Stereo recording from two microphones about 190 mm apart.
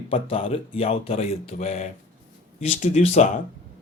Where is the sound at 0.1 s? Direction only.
30° left (ahead or behind).